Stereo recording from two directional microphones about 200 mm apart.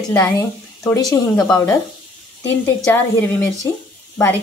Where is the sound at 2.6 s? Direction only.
10° left (ahead or behind).